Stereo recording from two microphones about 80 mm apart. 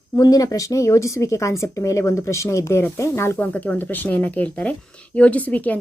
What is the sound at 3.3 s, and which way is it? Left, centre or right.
A woman's voice, centre.